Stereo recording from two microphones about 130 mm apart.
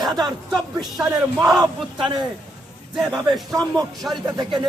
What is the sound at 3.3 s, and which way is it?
Speech, centre (ahead or behind).